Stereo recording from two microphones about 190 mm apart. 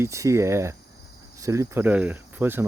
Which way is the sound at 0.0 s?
15° right (ahead or behind).